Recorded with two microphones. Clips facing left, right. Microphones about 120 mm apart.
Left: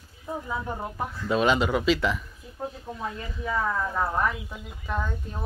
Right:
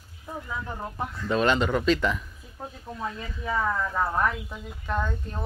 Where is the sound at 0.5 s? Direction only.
10° left (ahead or behind).